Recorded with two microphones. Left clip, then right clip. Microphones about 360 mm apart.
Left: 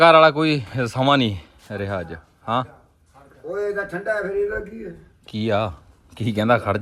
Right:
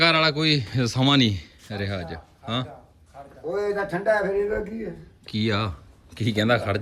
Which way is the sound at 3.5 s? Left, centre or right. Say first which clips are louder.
Left 1 dB; right.